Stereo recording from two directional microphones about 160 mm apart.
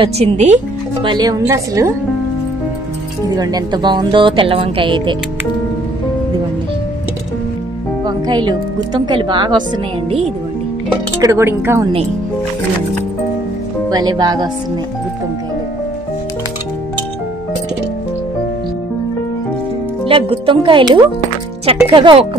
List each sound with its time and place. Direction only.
0.0 s speech: 45° right (ahead or behind)
1.0 s speech: 25° right (ahead or behind)
3.3 s a woman's voice: 25° right (ahead or behind)
8.0 s speech: 25° right (ahead or behind)
11.1 s speech: 15° right (ahead or behind)
13.8 s speech: 25° right (ahead or behind)
20.1 s a woman's voice: 35° right (ahead or behind)